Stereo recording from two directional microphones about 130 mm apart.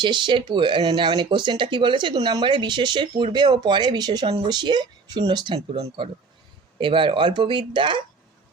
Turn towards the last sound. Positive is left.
turn(degrees=-40)  # may be behind; listen again after turning